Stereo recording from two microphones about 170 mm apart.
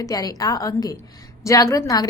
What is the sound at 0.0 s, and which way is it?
A woman's voice, 20° left (ahead or behind).